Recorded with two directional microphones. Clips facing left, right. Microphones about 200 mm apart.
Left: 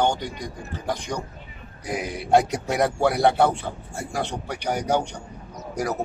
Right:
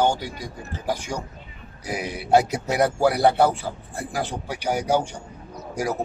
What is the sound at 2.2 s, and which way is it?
A man's voice, 5° right (ahead or behind).